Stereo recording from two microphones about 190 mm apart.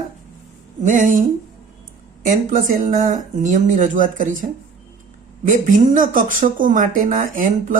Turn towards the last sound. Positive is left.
turn(degrees=-45)  # may be behind; listen again after turning